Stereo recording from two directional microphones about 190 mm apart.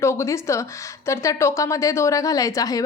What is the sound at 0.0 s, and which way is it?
Speech, 15° left (ahead or behind).